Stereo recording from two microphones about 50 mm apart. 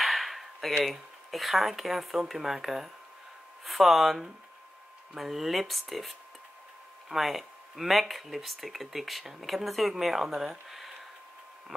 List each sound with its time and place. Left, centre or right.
0.0 s speech: centre